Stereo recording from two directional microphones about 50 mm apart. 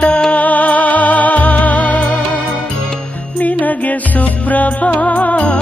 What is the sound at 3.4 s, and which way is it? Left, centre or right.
Music, left.